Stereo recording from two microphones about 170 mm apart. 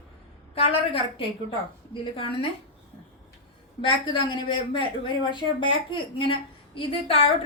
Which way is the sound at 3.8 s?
30° left (ahead or behind).